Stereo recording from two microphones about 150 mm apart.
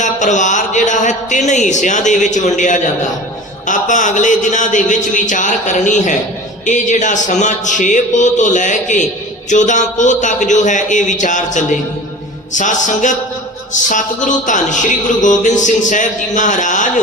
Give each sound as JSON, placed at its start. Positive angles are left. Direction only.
{"t": 0.0, "sound": "speech", "side_deg": 55}